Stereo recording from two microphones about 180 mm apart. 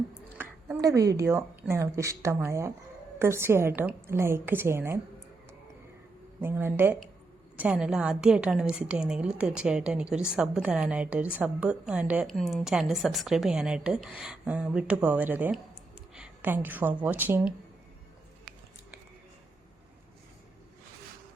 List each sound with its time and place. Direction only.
0.3 s a woman's voice: 15° right (ahead or behind)
6.4 s a woman's voice: 15° right (ahead or behind)